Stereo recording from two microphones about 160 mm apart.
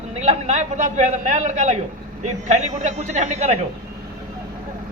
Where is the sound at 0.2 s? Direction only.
45° right (ahead or behind).